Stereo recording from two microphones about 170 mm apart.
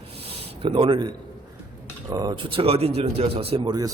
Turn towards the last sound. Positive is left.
turn(degrees=-25)  # may be behind; listen again after turning